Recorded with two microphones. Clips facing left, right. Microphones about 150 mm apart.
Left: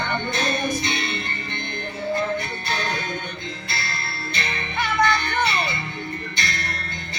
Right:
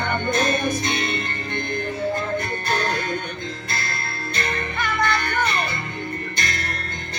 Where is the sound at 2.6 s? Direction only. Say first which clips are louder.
Right 4 dB; 45° right (ahead or behind).